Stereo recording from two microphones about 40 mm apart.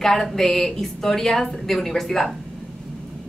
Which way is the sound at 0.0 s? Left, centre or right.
Centre.